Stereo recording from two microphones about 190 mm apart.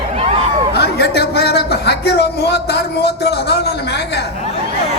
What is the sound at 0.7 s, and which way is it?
A man's voice, 60° left (ahead or behind).